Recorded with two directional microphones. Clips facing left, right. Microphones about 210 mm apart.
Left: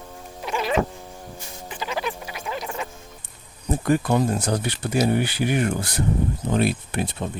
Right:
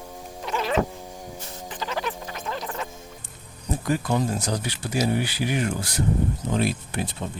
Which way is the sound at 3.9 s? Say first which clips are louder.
Left 4 dB; 60° left (ahead or behind).